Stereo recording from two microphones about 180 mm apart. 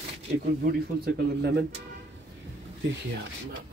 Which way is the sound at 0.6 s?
65° right (ahead or behind).